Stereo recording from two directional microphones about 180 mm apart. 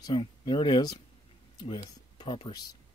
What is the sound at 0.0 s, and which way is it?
Speech, 25° left (ahead or behind).